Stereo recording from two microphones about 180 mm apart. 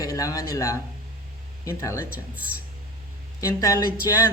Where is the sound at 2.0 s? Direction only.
10° right (ahead or behind).